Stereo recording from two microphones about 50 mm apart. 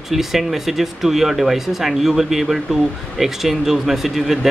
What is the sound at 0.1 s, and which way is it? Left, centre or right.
Speech, centre.